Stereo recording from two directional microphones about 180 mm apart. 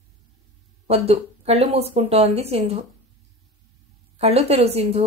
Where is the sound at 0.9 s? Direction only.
35° right (ahead or behind).